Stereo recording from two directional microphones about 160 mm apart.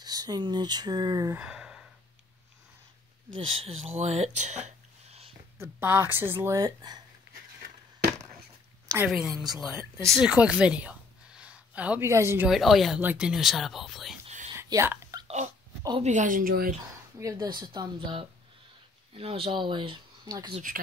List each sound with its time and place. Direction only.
0.0 s speech: 25° right (ahead or behind)
1.3 s gasp: 5° right (ahead or behind)
3.3 s speech: 35° right (ahead or behind)
5.6 s speech: 15° right (ahead or behind)
8.8 s a sound: 15° right (ahead or behind)
9.1 s a woman's voice: 5° right (ahead or behind)
12.4 s speech: centre (ahead or behind)
14.6 s whispering: 15° right (ahead or behind)
15.2 s dog: 45° right (ahead or behind)
16.0 s a woman's voice: 50° right (ahead or behind)
17.2 s speech: 20° right (ahead or behind)